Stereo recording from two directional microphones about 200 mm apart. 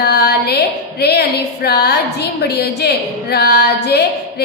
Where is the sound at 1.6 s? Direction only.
55° left (ahead or behind).